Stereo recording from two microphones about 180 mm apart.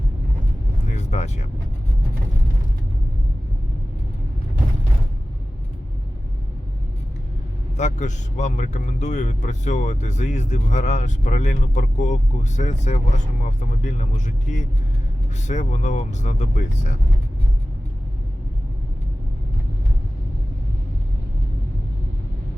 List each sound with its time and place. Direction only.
0.9 s speech: 40° left (ahead or behind)
7.8 s speech: 40° left (ahead or behind)